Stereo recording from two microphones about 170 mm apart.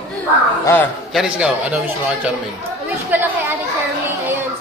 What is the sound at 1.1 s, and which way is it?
Speech, 5° right (ahead or behind).